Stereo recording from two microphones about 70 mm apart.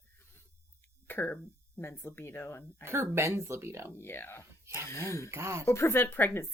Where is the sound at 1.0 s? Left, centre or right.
Left.